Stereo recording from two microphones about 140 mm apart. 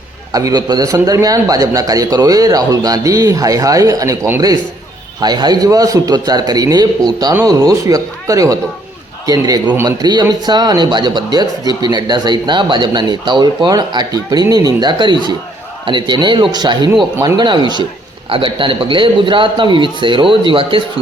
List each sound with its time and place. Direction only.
0.3 s a man's voice: 25° right (ahead or behind)
5.2 s a man's voice: 30° right (ahead or behind)